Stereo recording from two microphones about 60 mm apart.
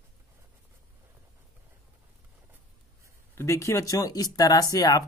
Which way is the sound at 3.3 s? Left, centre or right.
Left.